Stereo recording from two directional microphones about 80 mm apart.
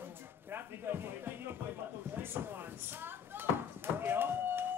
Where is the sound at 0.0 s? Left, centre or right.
Right.